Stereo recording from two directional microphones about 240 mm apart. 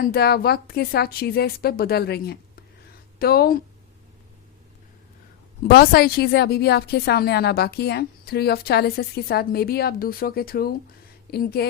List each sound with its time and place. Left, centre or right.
0.0 s a woman's voice: left
5.6 s a woman's voice: left